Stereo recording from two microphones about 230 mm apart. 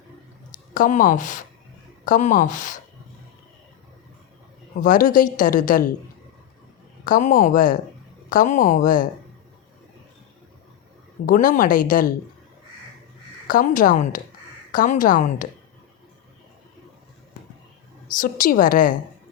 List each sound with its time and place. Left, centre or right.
0.7 s a woman's voice: left
4.8 s a woman's voice: left
7.0 s a woman's voice: left
11.3 s a woman's voice: left
13.5 s a woman's voice: left
18.2 s a woman's voice: left